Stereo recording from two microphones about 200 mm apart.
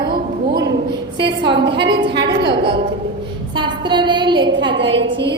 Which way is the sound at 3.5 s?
25° right (ahead or behind).